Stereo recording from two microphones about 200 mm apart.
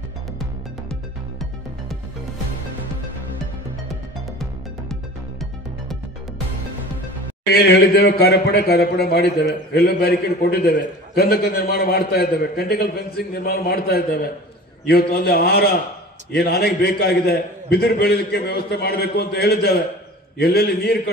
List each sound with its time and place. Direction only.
7.5 s a man's voice: 50° left (ahead or behind)